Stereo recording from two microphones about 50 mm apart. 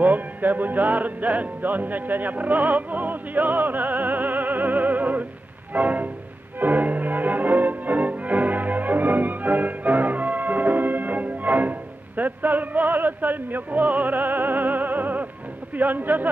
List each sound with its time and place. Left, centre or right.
0.0 s music: right
15.7 s a man's voice: right